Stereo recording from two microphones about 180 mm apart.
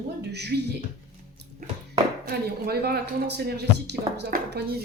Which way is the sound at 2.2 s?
60° right (ahead or behind).